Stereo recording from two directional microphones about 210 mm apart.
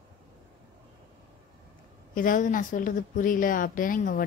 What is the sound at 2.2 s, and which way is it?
Speech, 40° left (ahead or behind).